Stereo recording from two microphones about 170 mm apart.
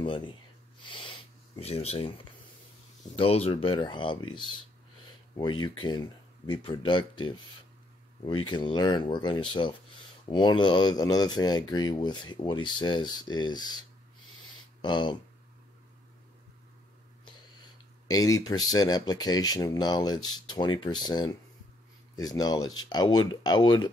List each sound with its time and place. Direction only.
0.0 s speech: 30° left (ahead or behind)
0.8 s a sound: 30° left (ahead or behind)
3.2 s speech: 35° left (ahead or behind)
18.0 s speech: 20° left (ahead or behind)